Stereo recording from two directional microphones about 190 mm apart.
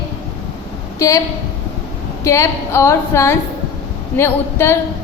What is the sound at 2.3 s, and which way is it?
A woman's voice, 15° left (ahead or behind).